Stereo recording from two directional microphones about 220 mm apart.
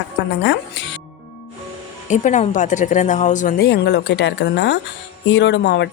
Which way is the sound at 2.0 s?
35° left (ahead or behind).